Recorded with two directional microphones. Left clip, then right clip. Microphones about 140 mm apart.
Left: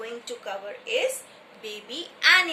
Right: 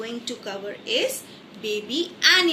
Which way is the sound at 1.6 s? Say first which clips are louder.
Right 9 dB; 15° left (ahead or behind).